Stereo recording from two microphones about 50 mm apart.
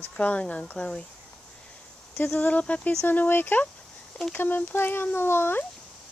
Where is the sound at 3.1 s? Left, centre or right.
Left.